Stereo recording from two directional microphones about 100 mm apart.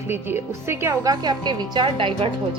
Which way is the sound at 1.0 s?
45° right (ahead or behind).